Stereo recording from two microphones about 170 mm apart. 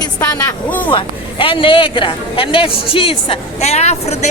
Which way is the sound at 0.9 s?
30° left (ahead or behind).